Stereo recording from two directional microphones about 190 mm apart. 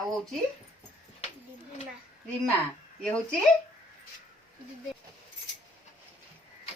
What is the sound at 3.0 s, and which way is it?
Speech, 5° left (ahead or behind).